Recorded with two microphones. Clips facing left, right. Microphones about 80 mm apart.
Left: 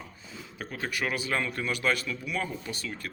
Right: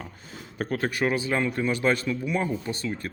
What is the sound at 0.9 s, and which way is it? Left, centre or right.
A man's voice, right.